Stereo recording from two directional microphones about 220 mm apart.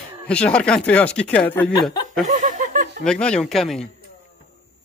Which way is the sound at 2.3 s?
35° right (ahead or behind).